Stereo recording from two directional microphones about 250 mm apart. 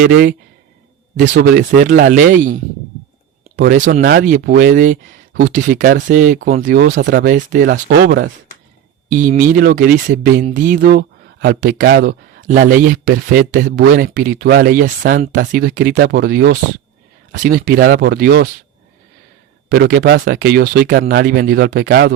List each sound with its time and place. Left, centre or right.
0.0 s speech: right
4.0 s speech: right
7.3 s speech: right
9.0 s speech: right
19.7 s speech: right